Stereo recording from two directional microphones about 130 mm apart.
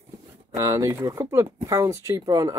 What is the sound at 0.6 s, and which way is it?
Speech, 20° right (ahead or behind).